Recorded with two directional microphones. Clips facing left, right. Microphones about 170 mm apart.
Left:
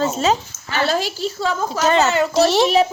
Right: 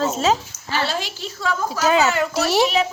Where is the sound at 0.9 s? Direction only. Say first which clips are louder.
Left 6 dB; 45° left (ahead or behind).